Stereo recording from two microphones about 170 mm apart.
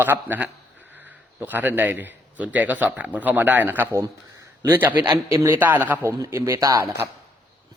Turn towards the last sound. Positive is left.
turn(degrees=-25)  # may be behind; listen again after turning